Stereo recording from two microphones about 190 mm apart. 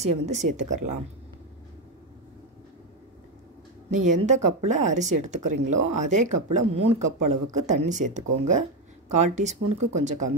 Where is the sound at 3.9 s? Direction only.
40° right (ahead or behind).